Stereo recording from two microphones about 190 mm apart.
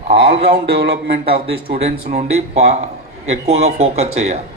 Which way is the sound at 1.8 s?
35° right (ahead or behind).